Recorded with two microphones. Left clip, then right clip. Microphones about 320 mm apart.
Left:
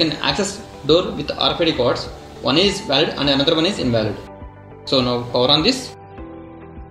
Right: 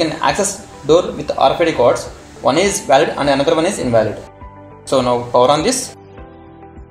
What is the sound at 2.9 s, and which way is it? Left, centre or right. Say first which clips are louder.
Speech: right 5 dB; right.